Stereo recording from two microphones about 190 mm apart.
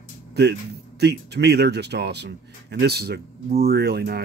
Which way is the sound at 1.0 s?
60° right (ahead or behind).